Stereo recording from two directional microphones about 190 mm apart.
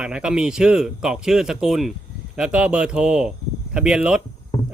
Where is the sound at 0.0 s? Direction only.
5° right (ahead or behind).